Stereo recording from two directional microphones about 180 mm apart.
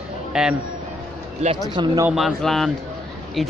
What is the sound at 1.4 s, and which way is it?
Speech, 40° right (ahead or behind).